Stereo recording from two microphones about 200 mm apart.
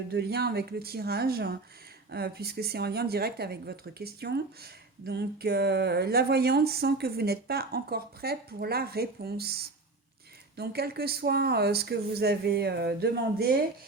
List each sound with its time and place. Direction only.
0.1 s speech: 55° right (ahead or behind)